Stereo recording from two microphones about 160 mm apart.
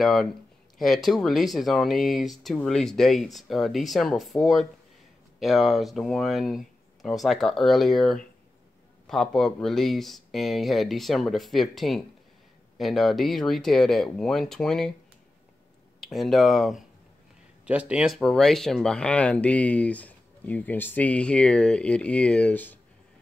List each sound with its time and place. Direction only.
0.0 s speech: centre (ahead or behind)
16.0 s speech: centre (ahead or behind)